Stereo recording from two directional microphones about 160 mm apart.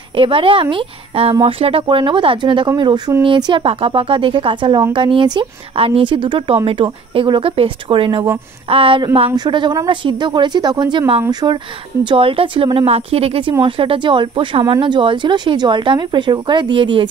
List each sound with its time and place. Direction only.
0.1 s a woman's voice: 35° right (ahead or behind)